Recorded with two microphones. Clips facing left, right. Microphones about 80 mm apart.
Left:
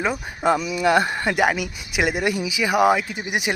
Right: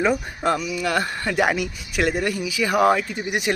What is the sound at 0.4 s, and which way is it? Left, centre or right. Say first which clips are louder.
Speech: left 4 dB; centre.